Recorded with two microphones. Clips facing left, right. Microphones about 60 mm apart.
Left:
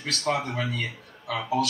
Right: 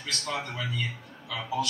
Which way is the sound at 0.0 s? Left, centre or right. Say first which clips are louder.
Left 6 dB; left.